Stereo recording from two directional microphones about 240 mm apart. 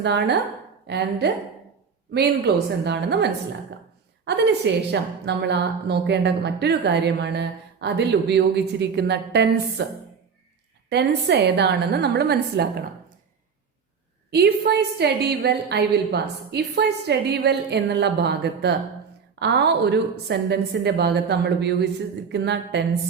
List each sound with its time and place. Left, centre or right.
0.0 s a woman's voice: right
10.8 s a woman's voice: right
14.3 s a woman's voice: right